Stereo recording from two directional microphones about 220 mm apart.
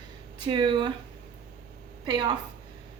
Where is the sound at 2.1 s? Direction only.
20° right (ahead or behind).